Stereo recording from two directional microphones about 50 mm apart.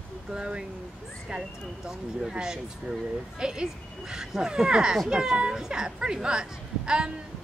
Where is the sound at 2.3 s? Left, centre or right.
Centre.